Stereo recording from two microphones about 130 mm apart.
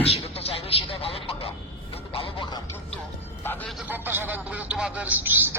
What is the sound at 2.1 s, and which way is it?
Music, 45° left (ahead or behind).